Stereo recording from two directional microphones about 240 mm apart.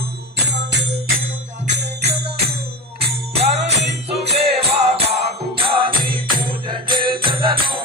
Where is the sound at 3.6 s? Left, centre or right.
Right.